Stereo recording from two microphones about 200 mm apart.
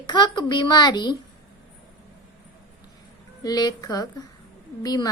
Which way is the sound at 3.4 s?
20° left (ahead or behind).